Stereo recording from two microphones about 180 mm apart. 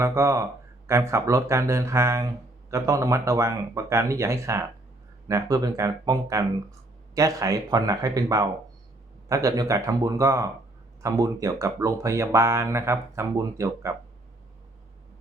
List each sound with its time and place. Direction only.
0.0 s speech: 15° right (ahead or behind)